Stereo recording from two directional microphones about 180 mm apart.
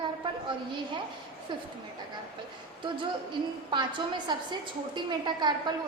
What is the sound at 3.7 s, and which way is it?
A woman's voice, 25° right (ahead or behind).